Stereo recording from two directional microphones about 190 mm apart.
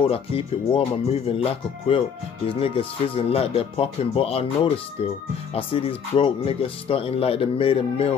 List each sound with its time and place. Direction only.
0.1 s speech: 30° left (ahead or behind)
5.5 s speech: 30° left (ahead or behind)